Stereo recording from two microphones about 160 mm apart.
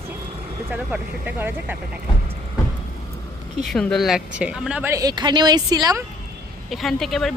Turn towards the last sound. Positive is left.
turn(degrees=0)  # may be behind; listen again after turning